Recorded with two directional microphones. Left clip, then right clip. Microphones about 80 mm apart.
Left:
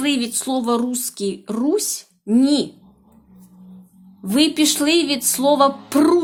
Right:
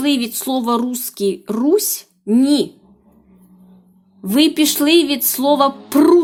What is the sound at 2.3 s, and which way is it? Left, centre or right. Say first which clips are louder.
Speech: right 2 dB; right.